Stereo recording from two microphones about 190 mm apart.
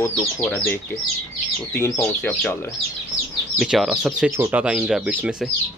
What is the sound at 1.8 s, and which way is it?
Speech, 10° left (ahead or behind).